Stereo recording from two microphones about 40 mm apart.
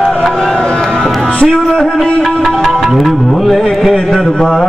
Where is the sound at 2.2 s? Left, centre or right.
Centre.